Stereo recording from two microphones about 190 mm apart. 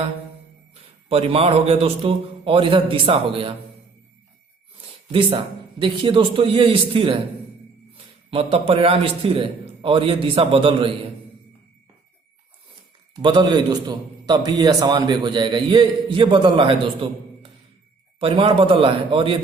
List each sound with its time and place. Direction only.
0.7 s a man's voice: 30° right (ahead or behind)
5.1 s a man's voice: 25° right (ahead or behind)
13.1 s a man's voice: 25° right (ahead or behind)